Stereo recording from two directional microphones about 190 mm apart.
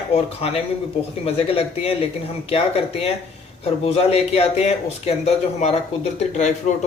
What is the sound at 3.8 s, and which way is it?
A man's voice, 35° left (ahead or behind).